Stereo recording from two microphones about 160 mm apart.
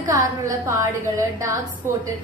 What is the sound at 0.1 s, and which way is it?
Speech, 20° right (ahead or behind).